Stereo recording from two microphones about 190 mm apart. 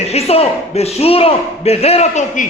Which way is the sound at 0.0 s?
35° left (ahead or behind).